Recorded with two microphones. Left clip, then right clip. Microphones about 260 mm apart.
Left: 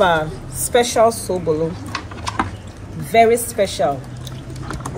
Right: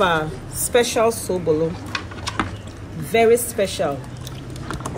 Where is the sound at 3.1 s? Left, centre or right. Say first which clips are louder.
Left 2 dB; centre.